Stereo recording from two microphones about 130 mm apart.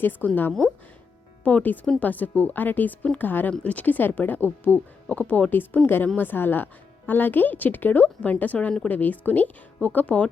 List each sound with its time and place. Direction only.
0.0 s a woman's voice: 15° left (ahead or behind)